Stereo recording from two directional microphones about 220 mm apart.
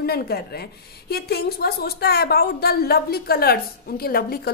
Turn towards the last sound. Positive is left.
turn(degrees=45)  # may be behind; listen again after turning